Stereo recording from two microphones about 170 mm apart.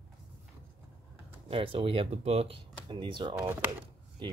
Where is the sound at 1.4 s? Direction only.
30° right (ahead or behind).